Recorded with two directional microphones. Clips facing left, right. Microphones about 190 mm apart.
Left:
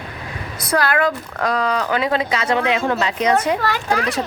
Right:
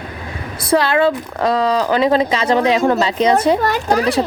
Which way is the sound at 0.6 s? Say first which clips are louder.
Right 4 dB; 25° right (ahead or behind).